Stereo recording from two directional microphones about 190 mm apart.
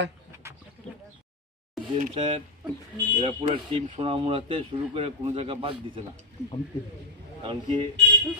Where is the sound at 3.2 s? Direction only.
25° right (ahead or behind).